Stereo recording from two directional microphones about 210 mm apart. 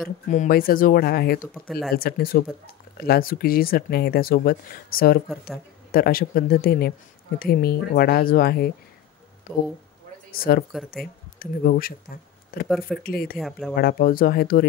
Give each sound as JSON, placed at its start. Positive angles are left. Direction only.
{"t": 0.3, "sound": "speech", "side_deg": 40}
{"t": 1.7, "sound": "speech", "side_deg": 0}
{"t": 2.0, "sound": "speech", "side_deg": 45}
{"t": 9.5, "sound": "speech", "side_deg": 10}
{"t": 10.3, "sound": "speech", "side_deg": 45}
{"t": 12.6, "sound": "speech", "side_deg": 0}
{"t": 13.0, "sound": "speech", "side_deg": 45}
{"t": 13.4, "sound": "speech", "side_deg": 0}
{"t": 13.7, "sound": "speech", "side_deg": 45}